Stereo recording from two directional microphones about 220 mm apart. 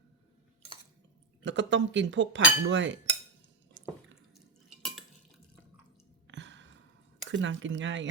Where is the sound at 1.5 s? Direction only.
55° right (ahead or behind).